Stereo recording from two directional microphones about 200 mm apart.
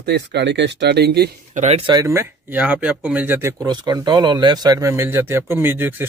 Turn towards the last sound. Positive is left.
turn(degrees=-10)  # may be behind; listen again after turning